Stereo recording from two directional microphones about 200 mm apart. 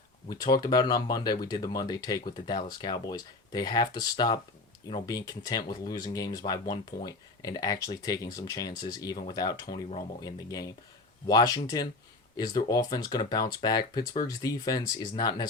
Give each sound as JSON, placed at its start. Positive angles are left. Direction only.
{"t": 0.3, "sound": "speech", "side_deg": 20}